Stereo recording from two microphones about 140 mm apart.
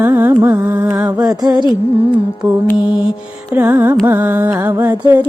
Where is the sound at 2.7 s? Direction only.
30° left (ahead or behind).